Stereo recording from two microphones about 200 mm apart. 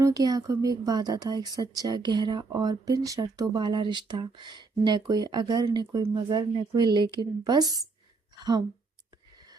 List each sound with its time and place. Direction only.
0.0 s speech: 15° right (ahead or behind)